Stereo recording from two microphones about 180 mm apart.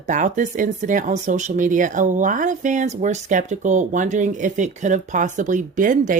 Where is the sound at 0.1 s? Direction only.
45° right (ahead or behind).